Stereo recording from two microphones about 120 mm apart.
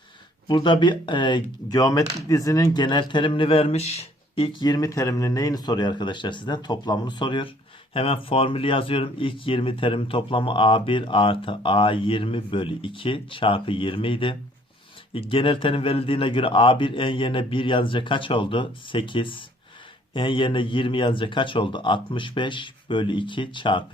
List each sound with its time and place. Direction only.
0.4 s speech: 40° left (ahead or behind)
2.8 s speech: 40° left (ahead or behind)